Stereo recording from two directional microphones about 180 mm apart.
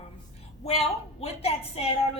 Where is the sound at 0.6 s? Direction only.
35° left (ahead or behind).